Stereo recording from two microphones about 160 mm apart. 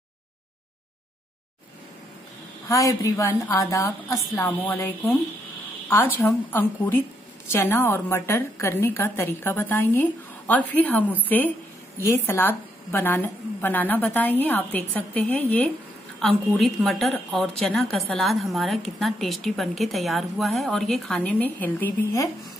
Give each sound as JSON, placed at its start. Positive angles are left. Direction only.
{"t": 2.7, "sound": "a woman's voice", "side_deg": 20}
{"t": 6.2, "sound": "a woman's voice", "side_deg": 10}